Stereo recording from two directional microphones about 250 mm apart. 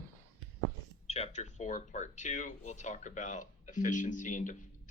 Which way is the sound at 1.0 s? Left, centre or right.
Left.